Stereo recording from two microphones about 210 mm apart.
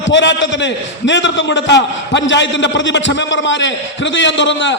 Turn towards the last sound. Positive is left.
turn(degrees=60)  # may be behind; listen again after turning